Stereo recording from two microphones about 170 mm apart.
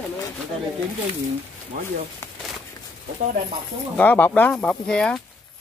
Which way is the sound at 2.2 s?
15° left (ahead or behind).